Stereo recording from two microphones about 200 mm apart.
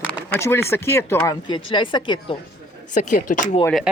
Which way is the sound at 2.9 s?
40° left (ahead or behind).